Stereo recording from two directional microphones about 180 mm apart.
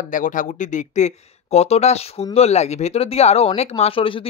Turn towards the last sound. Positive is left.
turn(degrees=30)  # may be behind; listen again after turning